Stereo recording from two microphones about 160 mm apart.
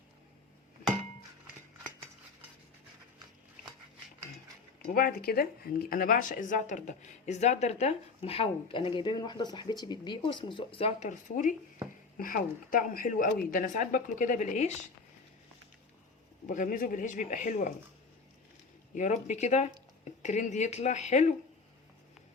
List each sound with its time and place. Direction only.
4.9 s speech: 70° left (ahead or behind); by 14.8 s 45° left (ahead or behind)
16.5 s speech: 55° left (ahead or behind)
18.9 s speech: 50° left (ahead or behind)